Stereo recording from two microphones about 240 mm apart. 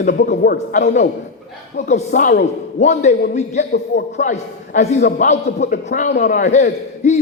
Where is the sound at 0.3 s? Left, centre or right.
Left.